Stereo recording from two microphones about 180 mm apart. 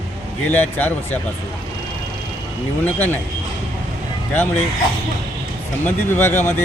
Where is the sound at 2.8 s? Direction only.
10° left (ahead or behind).